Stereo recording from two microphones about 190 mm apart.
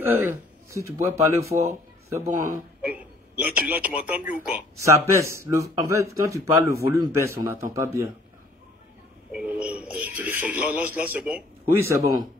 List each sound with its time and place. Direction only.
0.0 s speech: 10° right (ahead or behind)
2.2 s a man's voice: 40° right (ahead or behind)
2.8 s a sound: 10° right (ahead or behind)
4.0 s speech: 10° right (ahead or behind)
9.3 s speech: 5° right (ahead or behind)